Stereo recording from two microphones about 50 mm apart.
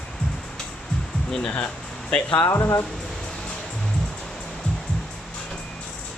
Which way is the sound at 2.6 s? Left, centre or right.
Left.